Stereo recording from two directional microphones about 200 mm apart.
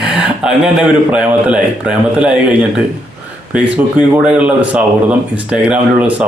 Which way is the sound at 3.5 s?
5° right (ahead or behind).